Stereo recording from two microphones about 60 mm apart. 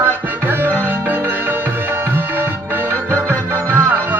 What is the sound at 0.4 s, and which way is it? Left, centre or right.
Music, right.